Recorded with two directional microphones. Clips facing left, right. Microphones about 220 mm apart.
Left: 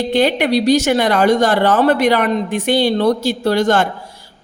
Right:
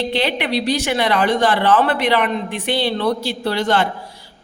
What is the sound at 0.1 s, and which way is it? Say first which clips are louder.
Speech: left 6 dB; 45° left (ahead or behind).